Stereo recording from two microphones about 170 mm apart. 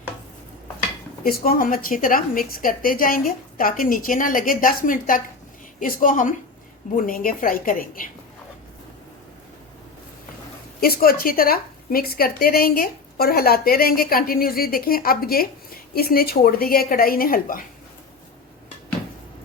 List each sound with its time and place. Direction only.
1.2 s a woman's voice: 60° left (ahead or behind)
10.8 s a woman's voice: 60° left (ahead or behind)